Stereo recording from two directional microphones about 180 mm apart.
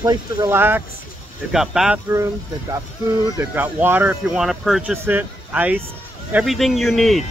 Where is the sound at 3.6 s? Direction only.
10° right (ahead or behind).